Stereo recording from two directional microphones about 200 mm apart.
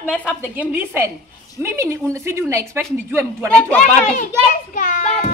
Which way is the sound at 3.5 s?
5° left (ahead or behind).